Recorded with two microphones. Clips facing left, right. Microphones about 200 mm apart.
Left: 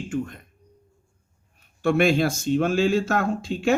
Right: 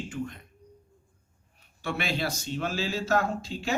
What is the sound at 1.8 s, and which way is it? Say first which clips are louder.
Speech: left 11 dB; 50° left (ahead or behind).